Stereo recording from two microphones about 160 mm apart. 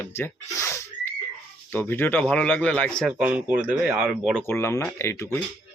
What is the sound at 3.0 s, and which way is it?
Speech, 5° right (ahead or behind).